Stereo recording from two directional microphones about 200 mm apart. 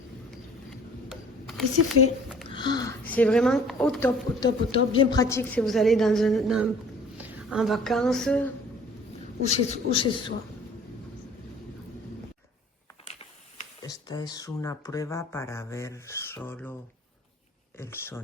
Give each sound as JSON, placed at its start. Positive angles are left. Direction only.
{"t": 1.0, "sound": "a sound", "side_deg": 0}
{"t": 2.5, "sound": "speech", "side_deg": 20}
{"t": 3.0, "sound": "a woman's voice", "side_deg": 5}
{"t": 4.4, "sound": "speech", "side_deg": 20}
{"t": 5.2, "sound": "a woman's voice", "side_deg": 15}
{"t": 9.5, "sound": "speech", "side_deg": 25}
{"t": 13.8, "sound": "speech", "side_deg": 20}
{"t": 17.7, "sound": "speech", "side_deg": 10}